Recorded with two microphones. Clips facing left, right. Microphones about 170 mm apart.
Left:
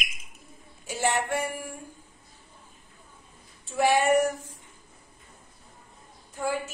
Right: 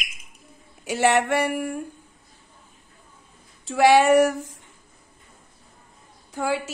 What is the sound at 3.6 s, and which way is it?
Speech, 90° right.